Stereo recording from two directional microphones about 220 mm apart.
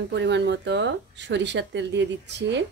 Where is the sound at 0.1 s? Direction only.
50° right (ahead or behind).